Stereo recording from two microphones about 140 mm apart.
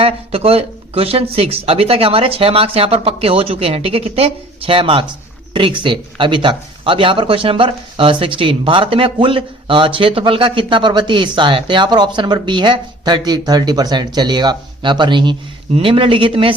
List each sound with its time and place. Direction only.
0.0 s speech: 45° right (ahead or behind)